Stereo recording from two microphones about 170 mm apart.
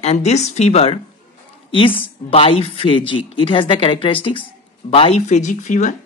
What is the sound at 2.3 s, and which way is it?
Speech, 35° left (ahead or behind).